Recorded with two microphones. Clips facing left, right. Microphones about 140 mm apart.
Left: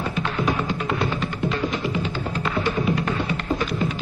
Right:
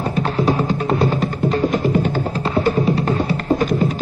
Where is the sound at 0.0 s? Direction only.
40° right (ahead or behind).